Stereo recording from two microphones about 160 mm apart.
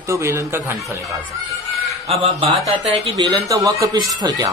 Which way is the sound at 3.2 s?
25° right (ahead or behind).